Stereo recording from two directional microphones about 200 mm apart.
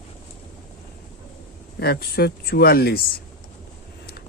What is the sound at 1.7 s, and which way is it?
Speech, 50° left (ahead or behind).